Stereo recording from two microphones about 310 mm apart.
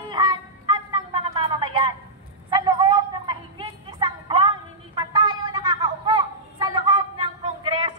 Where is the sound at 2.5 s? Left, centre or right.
Centre.